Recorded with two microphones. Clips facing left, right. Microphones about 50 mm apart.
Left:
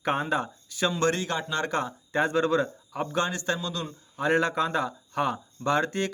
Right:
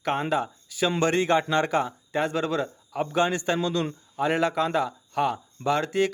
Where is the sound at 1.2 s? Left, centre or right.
Right.